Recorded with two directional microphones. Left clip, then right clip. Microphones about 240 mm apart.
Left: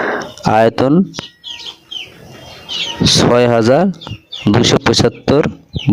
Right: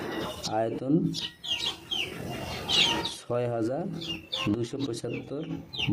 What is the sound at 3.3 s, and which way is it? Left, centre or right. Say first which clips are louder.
A man's voice: left 15 dB; left.